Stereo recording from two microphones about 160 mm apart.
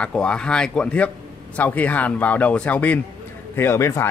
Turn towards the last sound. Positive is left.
turn(degrees=15)  # may be behind; listen again after turning